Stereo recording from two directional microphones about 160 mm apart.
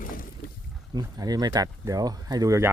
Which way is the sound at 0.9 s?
25° right (ahead or behind).